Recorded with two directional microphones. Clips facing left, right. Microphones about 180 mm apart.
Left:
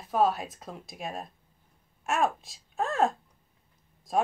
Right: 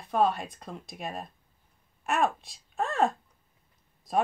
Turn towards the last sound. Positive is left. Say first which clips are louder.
# even
turn(degrees=0)  # may be behind; listen again after turning